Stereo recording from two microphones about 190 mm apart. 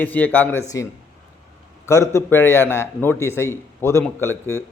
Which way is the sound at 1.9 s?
15° left (ahead or behind).